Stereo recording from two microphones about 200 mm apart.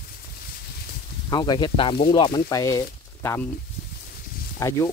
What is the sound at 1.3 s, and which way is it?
Speech, 20° left (ahead or behind).